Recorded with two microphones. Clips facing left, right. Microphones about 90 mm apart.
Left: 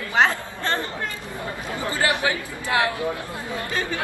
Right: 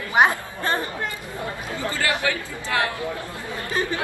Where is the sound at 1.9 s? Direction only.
20° left (ahead or behind).